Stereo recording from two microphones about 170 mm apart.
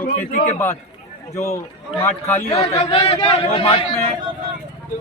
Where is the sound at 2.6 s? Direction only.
35° left (ahead or behind).